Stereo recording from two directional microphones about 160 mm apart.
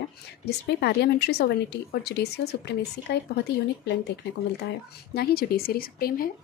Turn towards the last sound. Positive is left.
turn(degrees=65)  # may be behind; listen again after turning